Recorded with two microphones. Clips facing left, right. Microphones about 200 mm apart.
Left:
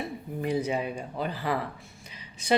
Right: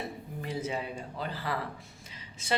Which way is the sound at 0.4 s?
15° left (ahead or behind).